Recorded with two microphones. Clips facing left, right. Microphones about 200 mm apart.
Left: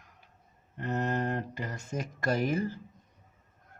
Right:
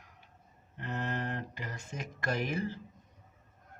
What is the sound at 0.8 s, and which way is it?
Speech, 40° left (ahead or behind).